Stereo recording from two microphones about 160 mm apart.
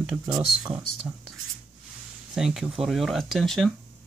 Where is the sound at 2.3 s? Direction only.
5° right (ahead or behind).